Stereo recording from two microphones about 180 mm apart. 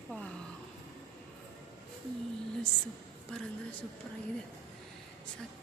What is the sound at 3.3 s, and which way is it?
Speech, 5° left (ahead or behind).